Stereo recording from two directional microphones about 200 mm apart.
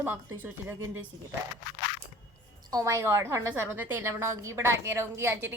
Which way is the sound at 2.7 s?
15° right (ahead or behind).